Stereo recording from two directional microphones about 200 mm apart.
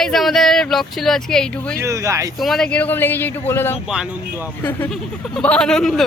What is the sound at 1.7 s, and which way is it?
Speech, 15° right (ahead or behind).